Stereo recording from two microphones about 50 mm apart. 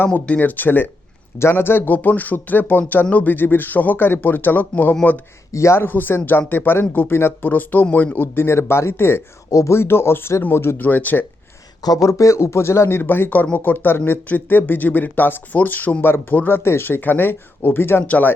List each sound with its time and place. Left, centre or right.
0.0 s speech: left
1.4 s speech: left
5.5 s a man's voice: left
5.8 s speech: left
8.1 s speech: left
9.6 s speech: left
10.8 s speech: left
12.0 s speech: left
13.0 s speech: left
18.0 s speech: left